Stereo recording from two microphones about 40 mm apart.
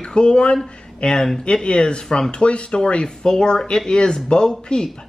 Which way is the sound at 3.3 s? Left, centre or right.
Centre.